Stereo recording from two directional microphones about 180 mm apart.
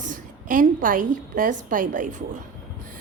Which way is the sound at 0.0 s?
50° right (ahead or behind).